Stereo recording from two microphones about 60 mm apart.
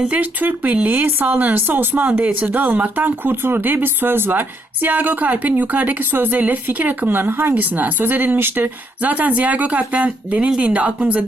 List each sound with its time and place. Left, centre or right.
0.0 s speech: right